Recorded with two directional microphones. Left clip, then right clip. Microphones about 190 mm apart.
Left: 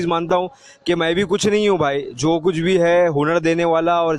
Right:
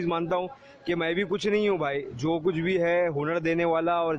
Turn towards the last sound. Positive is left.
turn(degrees=45)  # may be behind; listen again after turning